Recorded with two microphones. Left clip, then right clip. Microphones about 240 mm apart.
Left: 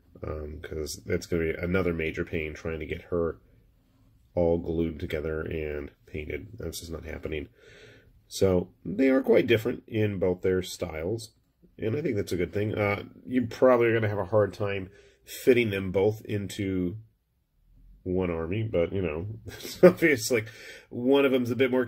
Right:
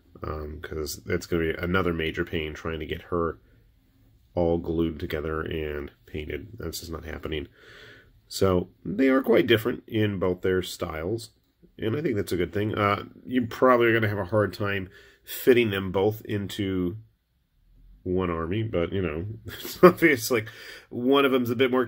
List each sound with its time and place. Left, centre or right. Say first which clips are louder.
0.2 s speech: right 2 dB; centre; by 15.0 s right
15.2 s speech: right 2 dB; centre
18.0 s speech: right 2 dB; centre